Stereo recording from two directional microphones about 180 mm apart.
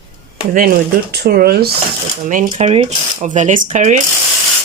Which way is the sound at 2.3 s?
45° right (ahead or behind).